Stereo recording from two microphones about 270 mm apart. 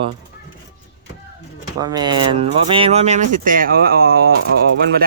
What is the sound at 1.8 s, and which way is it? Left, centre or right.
Speech, centre.